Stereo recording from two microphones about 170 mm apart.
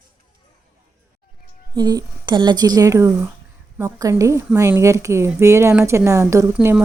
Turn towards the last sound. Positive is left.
turn(degrees=-10)  # may be behind; listen again after turning